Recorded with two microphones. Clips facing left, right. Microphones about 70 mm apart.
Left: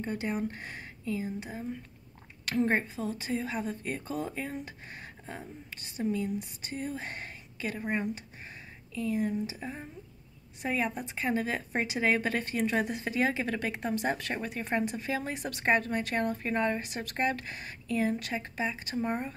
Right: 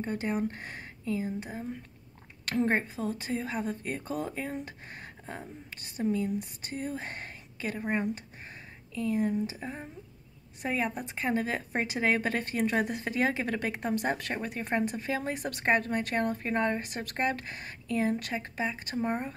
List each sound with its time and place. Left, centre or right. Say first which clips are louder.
0.1 s a woman's voice: right 2 dB; right
8.1 s a sound: right 1 dB; right
9.6 s a woman's voice: right 1 dB; right
18.9 s speech: right 1 dB; right